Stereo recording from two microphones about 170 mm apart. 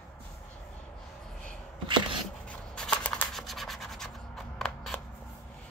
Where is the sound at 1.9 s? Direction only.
30° right (ahead or behind).